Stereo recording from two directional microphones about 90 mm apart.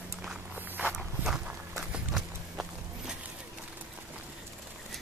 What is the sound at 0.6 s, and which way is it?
Walk, 20° right (ahead or behind).